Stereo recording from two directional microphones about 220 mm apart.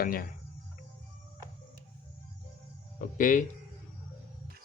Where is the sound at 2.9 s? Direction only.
35° left (ahead or behind).